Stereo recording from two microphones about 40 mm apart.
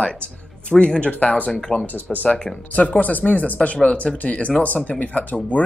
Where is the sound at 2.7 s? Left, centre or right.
Left.